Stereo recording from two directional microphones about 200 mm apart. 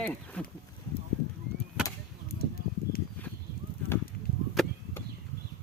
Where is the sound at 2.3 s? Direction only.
50° left (ahead or behind).